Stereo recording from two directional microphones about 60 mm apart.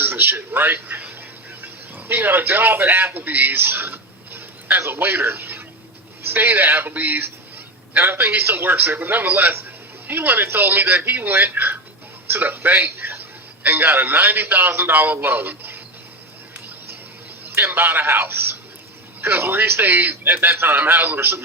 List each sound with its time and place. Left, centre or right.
0.0 s a sound: right
1.6 s a man's voice: right
17.7 s a man's voice: right